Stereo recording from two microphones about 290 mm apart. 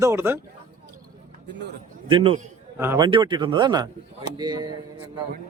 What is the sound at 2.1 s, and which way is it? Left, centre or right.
A man's voice, centre.